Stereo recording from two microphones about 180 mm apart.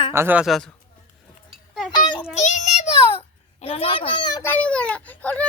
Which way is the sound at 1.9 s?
25° left (ahead or behind).